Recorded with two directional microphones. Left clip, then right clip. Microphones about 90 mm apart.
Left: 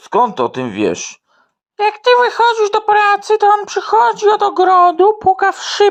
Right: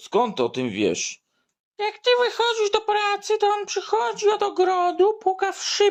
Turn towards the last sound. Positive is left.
turn(degrees=50)  # may be behind; listen again after turning